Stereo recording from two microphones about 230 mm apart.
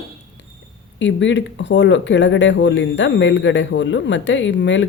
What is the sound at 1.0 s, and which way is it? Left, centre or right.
Speech, left.